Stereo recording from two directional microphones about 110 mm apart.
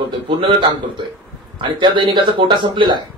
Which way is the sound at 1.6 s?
45° right (ahead or behind).